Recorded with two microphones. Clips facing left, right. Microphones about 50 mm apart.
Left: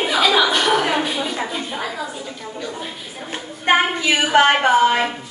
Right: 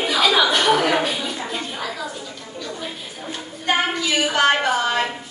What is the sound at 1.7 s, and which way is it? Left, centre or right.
Bathtub, centre.